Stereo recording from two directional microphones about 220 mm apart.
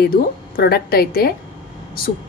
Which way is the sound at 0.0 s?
45° left (ahead or behind).